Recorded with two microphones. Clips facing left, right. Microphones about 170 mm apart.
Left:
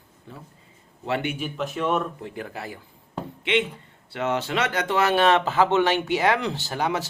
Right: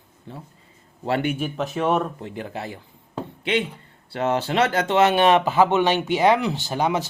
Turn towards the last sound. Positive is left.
turn(degrees=-20)  # may be behind; listen again after turning